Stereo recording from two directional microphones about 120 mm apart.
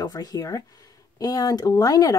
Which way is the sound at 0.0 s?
30° left (ahead or behind).